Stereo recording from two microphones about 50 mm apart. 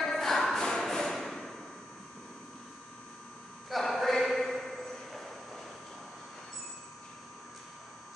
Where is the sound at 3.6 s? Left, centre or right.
Centre.